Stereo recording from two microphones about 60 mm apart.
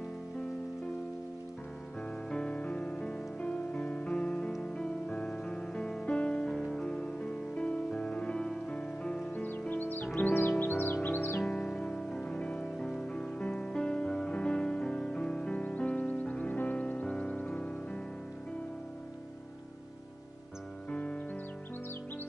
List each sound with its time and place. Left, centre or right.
2.3 s music: centre
9.3 s music: left
11.4 s music: centre
20.9 s music: centre